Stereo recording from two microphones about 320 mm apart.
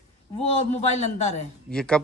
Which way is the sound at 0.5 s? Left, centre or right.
Left.